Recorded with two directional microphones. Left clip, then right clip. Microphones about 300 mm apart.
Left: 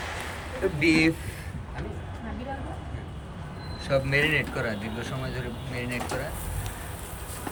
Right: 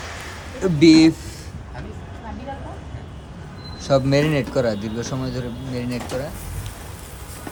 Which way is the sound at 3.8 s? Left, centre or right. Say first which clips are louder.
Right 6 dB; centre.